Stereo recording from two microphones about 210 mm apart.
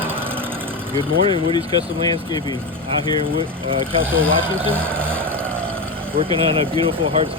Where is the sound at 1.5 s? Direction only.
20° left (ahead or behind).